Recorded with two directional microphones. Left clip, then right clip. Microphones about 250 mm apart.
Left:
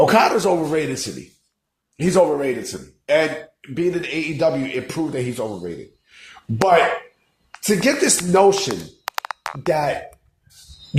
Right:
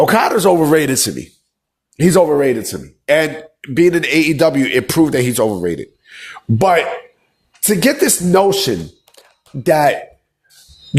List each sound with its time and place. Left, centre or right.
0.0 s a man's voice: right